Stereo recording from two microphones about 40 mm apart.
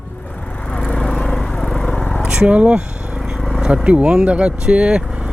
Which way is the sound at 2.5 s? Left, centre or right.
Right.